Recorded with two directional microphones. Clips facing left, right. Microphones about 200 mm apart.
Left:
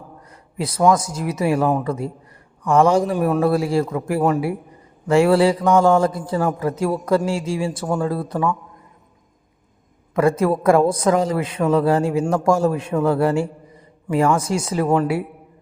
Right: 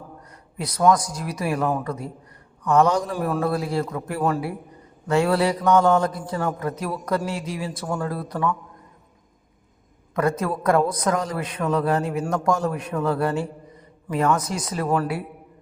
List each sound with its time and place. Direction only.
0.3 s a man's voice: 25° left (ahead or behind)
10.2 s a man's voice: 25° left (ahead or behind)